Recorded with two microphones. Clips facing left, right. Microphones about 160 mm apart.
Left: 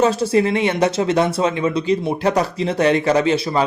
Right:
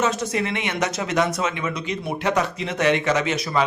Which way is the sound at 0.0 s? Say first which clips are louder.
Left 7 dB; 30° left (ahead or behind).